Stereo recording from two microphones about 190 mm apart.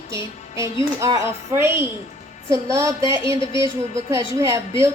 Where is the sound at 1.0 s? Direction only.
15° right (ahead or behind).